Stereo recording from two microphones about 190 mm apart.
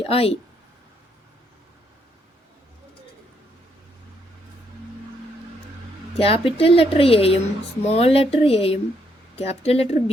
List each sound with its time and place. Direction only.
0.0 s speech: 30° left (ahead or behind)
6.1 s speech: 30° left (ahead or behind)